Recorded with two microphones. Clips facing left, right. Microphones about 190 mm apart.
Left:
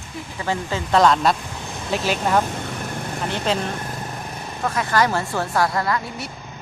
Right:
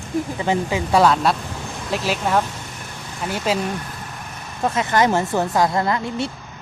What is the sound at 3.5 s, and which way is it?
Speech, 5° right (ahead or behind).